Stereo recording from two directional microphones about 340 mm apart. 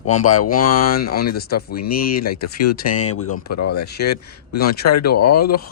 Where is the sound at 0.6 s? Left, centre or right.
Left.